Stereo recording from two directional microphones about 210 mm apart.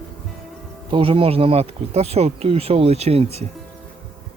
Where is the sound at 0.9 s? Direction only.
25° right (ahead or behind).